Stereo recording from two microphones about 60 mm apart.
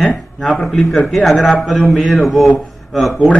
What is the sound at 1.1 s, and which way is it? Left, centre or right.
A man's voice, centre.